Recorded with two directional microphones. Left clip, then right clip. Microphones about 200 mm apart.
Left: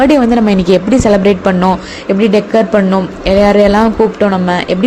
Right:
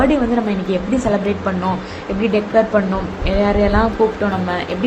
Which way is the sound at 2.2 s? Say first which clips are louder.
Left 5 dB; 40° left (ahead or behind).